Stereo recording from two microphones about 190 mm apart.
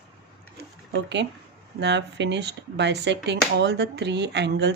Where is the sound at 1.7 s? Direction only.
65° right (ahead or behind).